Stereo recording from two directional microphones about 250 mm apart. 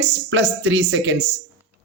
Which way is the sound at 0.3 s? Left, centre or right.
Right.